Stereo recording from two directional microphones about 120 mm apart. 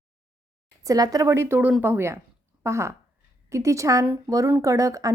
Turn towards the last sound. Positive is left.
turn(degrees=-25)  # may be behind; listen again after turning